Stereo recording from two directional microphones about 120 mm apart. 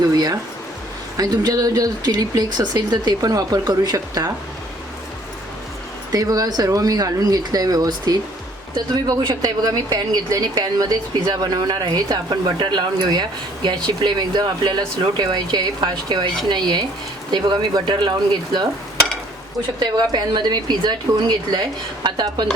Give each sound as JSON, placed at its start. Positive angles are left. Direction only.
{"t": 0.1, "sound": "a woman's voice", "side_deg": -30}
{"t": 6.1, "sound": "a woman's voice", "side_deg": -30}
{"t": 19.8, "sound": "a woman's voice", "side_deg": -40}